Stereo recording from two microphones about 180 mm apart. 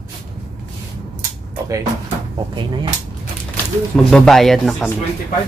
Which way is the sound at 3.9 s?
5° left (ahead or behind).